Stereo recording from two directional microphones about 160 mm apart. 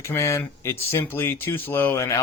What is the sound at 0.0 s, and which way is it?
Speech, 20° left (ahead or behind).